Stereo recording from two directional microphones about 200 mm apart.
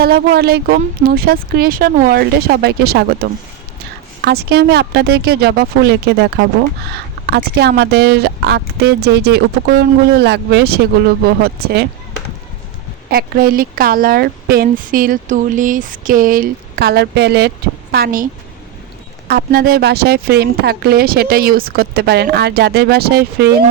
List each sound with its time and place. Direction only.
0.0 s speech: 50° right (ahead or behind)
13.1 s speech: 50° right (ahead or behind)
17.9 s speech: 45° right (ahead or behind)
19.3 s speech: 50° right (ahead or behind)